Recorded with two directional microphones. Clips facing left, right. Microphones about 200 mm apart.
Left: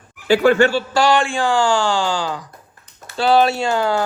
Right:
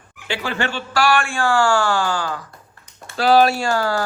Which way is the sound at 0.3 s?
45° left (ahead or behind).